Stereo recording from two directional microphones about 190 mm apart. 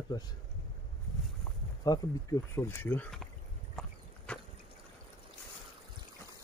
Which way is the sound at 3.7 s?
5° left (ahead or behind).